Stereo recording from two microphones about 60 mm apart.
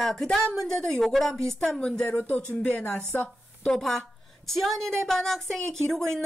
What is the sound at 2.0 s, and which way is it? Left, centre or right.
Speech, left.